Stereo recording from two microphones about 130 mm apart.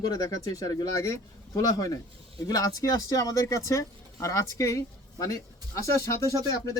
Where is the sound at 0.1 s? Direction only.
30° left (ahead or behind).